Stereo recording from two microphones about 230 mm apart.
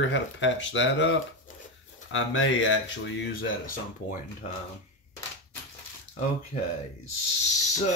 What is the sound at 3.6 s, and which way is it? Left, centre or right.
Speech, left.